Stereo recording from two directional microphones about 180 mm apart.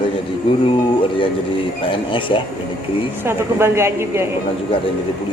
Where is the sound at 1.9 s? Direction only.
30° left (ahead or behind).